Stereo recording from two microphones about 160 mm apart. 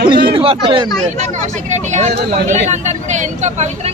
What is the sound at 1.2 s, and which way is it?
Speech, 45° right (ahead or behind).